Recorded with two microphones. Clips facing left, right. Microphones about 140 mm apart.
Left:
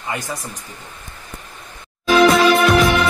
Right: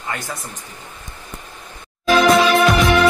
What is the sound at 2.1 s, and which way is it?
Music, centre (ahead or behind).